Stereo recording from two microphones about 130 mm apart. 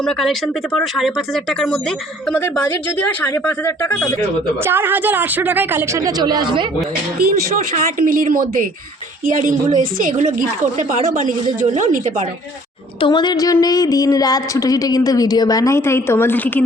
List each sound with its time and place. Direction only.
0.0 s speech: 5° left (ahead or behind)
3.2 s speech: 15° left (ahead or behind)
4.6 s speech: 15° right (ahead or behind); by 6.7 s 40° right (ahead or behind)
7.5 s a woman's voice: 90° right
11.6 s speech: 75° right (ahead or behind)
13.0 s a woman's voice: 35° left (ahead or behind); by 16.6 s 15° left (ahead or behind)